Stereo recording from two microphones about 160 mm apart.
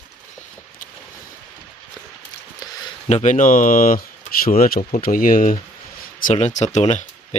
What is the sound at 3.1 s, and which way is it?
Speech, 45° left (ahead or behind).